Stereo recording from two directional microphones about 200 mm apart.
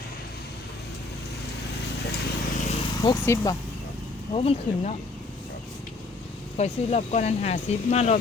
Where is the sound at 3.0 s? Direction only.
15° left (ahead or behind).